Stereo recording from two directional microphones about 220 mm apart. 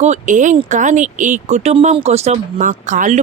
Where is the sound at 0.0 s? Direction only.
35° right (ahead or behind).